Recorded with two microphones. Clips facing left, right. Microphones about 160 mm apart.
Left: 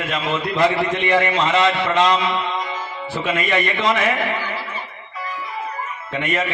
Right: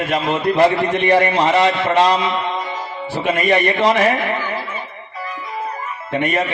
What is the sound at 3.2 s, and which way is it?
Speech, 35° right (ahead or behind).